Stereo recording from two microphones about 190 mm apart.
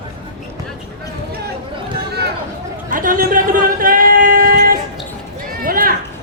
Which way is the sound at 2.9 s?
45° right (ahead or behind).